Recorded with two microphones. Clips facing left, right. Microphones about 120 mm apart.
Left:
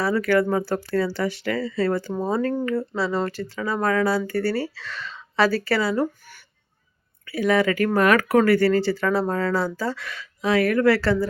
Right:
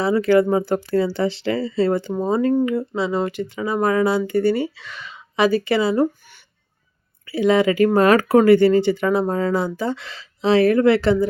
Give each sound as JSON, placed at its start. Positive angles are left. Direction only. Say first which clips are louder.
{"t": 0.0, "sound": "speech", "louder": "right 4 dB", "side_deg": -20}